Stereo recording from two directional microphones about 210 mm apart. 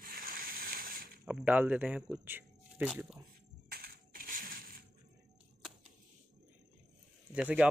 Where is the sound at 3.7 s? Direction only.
45° right (ahead or behind).